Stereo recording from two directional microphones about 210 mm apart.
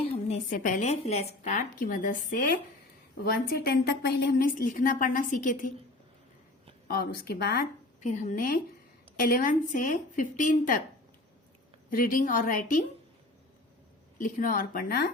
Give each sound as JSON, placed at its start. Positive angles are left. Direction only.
{"t": 0.0, "sound": "a woman's voice", "side_deg": 35}
{"t": 6.8, "sound": "a woman's voice", "side_deg": 45}
{"t": 11.9, "sound": "a woman's voice", "side_deg": 40}
{"t": 14.2, "sound": "speech", "side_deg": 40}